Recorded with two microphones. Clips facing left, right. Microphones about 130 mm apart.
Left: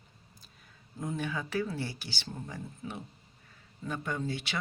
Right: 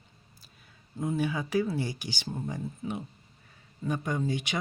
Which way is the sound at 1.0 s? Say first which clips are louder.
Right 5 dB; 5° right (ahead or behind).